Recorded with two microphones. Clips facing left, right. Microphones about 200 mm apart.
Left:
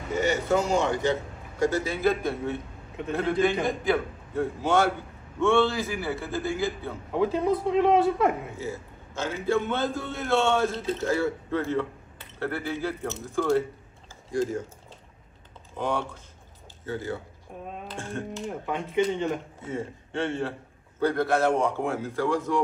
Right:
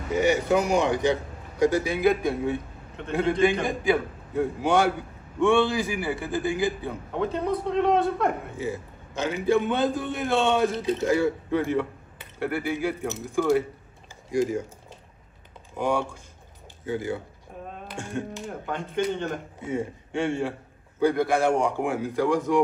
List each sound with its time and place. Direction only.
0.1 s a man's voice: 15° right (ahead or behind)
3.0 s a man's voice: 5° left (ahead or behind)
3.6 s a man's voice: 10° right (ahead or behind)
7.1 s a man's voice: centre (ahead or behind)
9.1 s a man's voice: 15° right (ahead or behind)
15.7 s a man's voice: 10° right (ahead or behind)
17.5 s a sound: centre (ahead or behind)
17.8 s speech: 15° right (ahead or behind)
18.5 s a man's voice: centre (ahead or behind)
19.6 s a man's voice: 15° right (ahead or behind)